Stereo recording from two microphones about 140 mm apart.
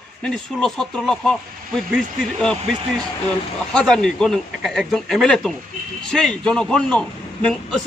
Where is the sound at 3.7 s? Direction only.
5° left (ahead or behind).